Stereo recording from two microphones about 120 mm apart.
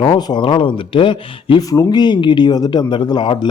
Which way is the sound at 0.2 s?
40° left (ahead or behind).